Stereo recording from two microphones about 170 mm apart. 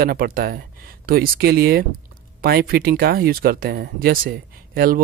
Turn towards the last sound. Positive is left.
turn(degrees=-60)  # may be behind; listen again after turning